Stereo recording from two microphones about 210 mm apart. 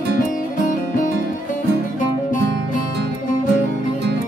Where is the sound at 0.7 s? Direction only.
40° left (ahead or behind).